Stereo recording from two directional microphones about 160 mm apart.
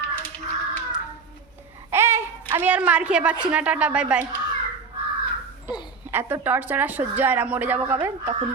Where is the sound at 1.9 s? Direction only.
15° right (ahead or behind).